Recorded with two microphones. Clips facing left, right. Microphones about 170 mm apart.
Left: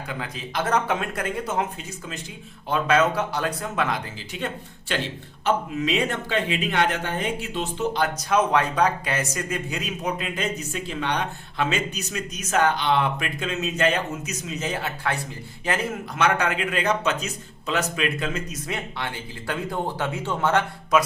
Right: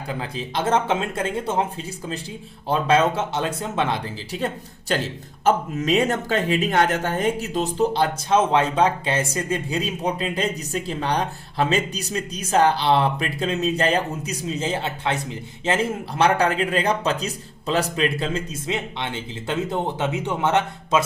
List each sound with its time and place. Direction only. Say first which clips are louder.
0.1 s a man's voice: right 4 dB; 30° right (ahead or behind)
2.6 s a man's voice: right 2 dB; 30° right (ahead or behind)